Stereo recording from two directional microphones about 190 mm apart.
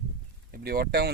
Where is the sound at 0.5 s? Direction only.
50° right (ahead or behind).